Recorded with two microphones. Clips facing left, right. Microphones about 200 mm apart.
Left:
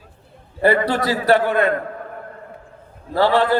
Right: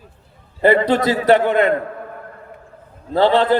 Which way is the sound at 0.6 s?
20° right (ahead or behind).